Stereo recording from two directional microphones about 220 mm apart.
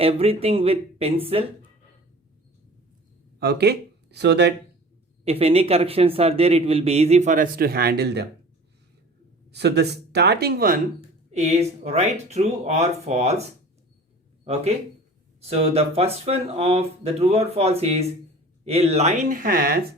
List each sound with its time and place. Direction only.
0.0 s speech: 25° right (ahead or behind)
3.4 s speech: 50° right (ahead or behind)
5.2 s speech: 25° right (ahead or behind); by 8.3 s 50° right (ahead or behind)
9.5 s speech: 50° right (ahead or behind)
11.3 s speech: 30° right (ahead or behind)
14.4 s speech: 25° right (ahead or behind)